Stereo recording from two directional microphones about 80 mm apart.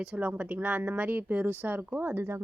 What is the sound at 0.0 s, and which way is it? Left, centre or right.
Speech, centre.